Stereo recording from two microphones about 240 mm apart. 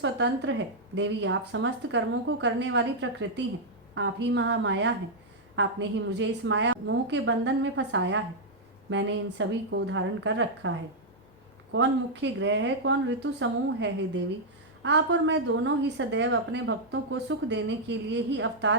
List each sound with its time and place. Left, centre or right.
0.0 s a woman's voice: right